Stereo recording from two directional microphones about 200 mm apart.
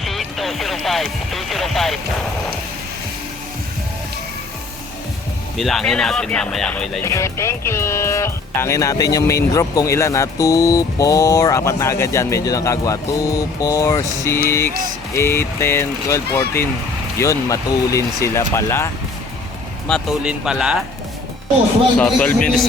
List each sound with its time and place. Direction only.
0.0 s music: centre (ahead or behind)
5.5 s speech: centre (ahead or behind)
7.0 s speech: 15° left (ahead or behind)
19.9 s speech: centre (ahead or behind)
21.9 s speech: 5° left (ahead or behind)